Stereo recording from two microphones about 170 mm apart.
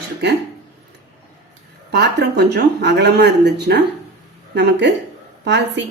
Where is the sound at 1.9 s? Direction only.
75° right (ahead or behind).